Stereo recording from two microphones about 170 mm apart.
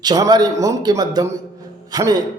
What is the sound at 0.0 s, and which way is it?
A man's voice, 25° right (ahead or behind).